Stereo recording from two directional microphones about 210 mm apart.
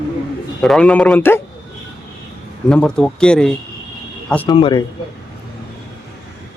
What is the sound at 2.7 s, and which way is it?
A man's voice, 5° left (ahead or behind).